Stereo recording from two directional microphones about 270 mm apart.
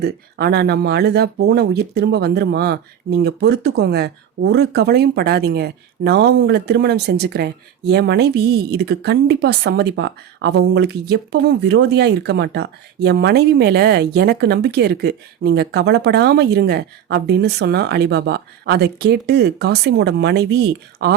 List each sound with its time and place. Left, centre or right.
0.0 s speech: right